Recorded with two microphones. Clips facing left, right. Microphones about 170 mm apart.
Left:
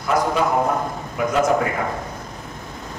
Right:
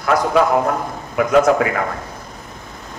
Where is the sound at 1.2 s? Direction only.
80° right.